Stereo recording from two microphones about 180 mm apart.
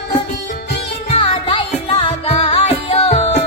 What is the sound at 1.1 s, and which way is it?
Music, 30° left (ahead or behind).